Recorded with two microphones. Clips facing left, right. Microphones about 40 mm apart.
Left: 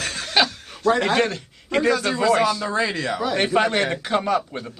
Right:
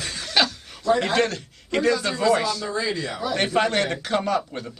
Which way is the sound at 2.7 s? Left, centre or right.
Left.